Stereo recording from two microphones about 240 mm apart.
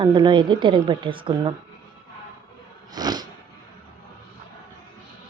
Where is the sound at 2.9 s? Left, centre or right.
Centre.